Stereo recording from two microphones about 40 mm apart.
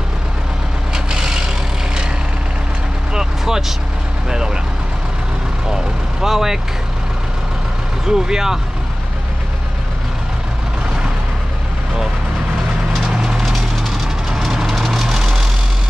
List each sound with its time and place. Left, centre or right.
0.9 s vehicle: centre
3.1 s vehicle: centre
6.2 s speech: centre
8.1 s speech: centre
13.1 s a sound: centre
14.3 s vehicle: centre